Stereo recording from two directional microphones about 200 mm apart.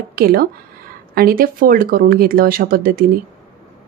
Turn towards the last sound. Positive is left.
turn(degrees=-45)  # may be behind; listen again after turning